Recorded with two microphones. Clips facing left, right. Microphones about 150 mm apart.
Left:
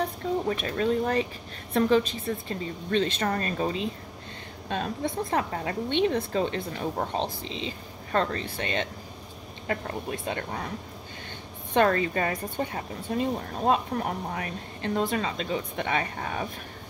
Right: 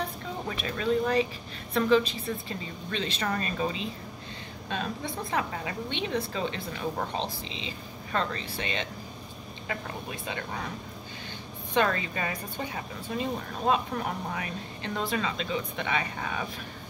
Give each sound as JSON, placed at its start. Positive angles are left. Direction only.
{"t": 0.5, "sound": "speech", "side_deg": 45}
{"t": 11.7, "sound": "speech", "side_deg": 45}